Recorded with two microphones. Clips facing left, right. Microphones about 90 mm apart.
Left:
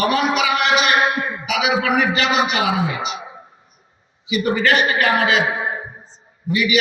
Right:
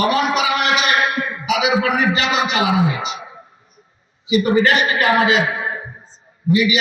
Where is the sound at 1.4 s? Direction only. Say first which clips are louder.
Right 3 dB; 35° right (ahead or behind).